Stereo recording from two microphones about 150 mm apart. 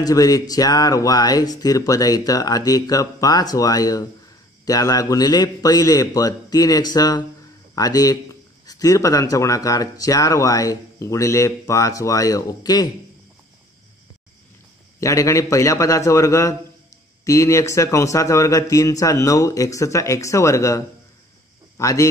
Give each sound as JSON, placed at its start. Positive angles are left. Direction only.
{"t": 0.0, "sound": "speech", "side_deg": 25}
{"t": 15.0, "sound": "speech", "side_deg": 20}